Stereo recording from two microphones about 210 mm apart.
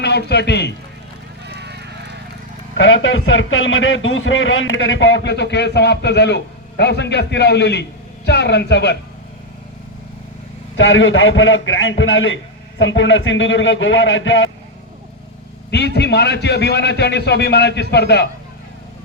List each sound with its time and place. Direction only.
0.3 s a man's voice: 55° left (ahead or behind)
1.5 s run: 55° right (ahead or behind)
2.7 s a man's voice: 65° left (ahead or behind)
10.8 s a man's voice: 65° left (ahead or behind)
16.0 s a man's voice: 55° left (ahead or behind)